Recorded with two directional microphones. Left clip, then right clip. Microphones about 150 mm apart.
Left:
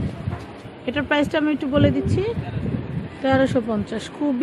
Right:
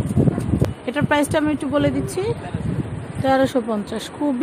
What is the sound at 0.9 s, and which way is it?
A woman's voice, 20° right (ahead or behind).